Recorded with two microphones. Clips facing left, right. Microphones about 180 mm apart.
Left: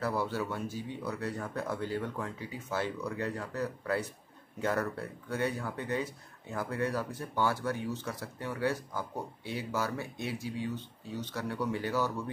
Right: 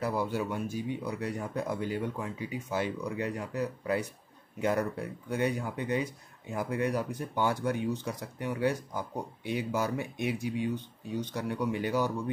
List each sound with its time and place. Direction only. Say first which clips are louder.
0.0 s speech: right 2 dB; 15° right (ahead or behind)